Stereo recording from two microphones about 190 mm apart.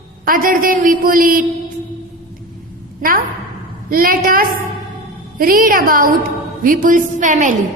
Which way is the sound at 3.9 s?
50° right (ahead or behind).